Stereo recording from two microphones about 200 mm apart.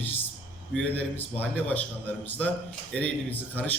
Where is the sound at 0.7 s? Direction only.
10° left (ahead or behind).